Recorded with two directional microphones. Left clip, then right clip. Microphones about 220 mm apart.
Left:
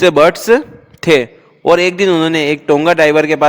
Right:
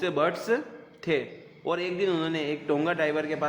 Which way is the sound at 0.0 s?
50° left (ahead or behind).